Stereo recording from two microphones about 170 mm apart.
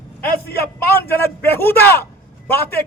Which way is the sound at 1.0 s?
15° left (ahead or behind).